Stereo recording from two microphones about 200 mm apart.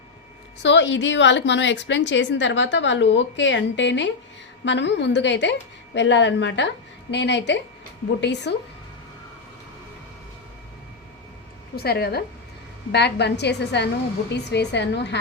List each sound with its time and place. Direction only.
0.6 s a woman's voice: 65° left (ahead or behind)
11.8 s a woman's voice: 50° left (ahead or behind)